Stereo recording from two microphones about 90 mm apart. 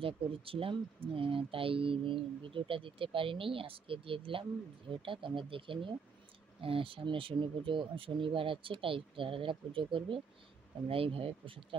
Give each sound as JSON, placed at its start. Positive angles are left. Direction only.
{"t": 0.0, "sound": "speech", "side_deg": -90}
{"t": 4.9, "sound": "speech", "side_deg": -70}
{"t": 10.9, "sound": "speech", "side_deg": -90}